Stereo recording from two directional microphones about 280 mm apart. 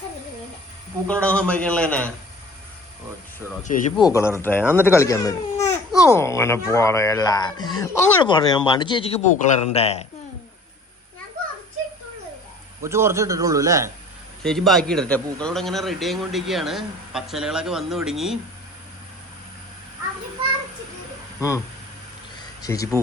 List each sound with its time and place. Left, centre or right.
1.0 s a man's voice: centre
3.6 s speech: left
4.0 s speech: centre
12.8 s a man's voice: centre
14.4 s a man's voice: centre
22.6 s speech: centre